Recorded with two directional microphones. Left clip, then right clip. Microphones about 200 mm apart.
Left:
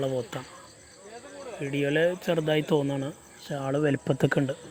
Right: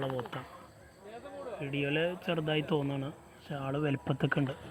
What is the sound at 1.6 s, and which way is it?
Speech, 40° left (ahead or behind).